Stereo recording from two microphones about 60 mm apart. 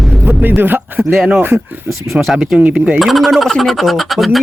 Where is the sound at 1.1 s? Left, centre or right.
Centre.